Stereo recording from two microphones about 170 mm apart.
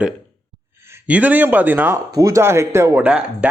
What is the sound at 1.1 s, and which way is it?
Speech, 10° right (ahead or behind).